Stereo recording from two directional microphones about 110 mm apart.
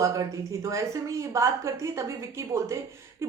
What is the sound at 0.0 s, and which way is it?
A woman's voice, 30° right (ahead or behind).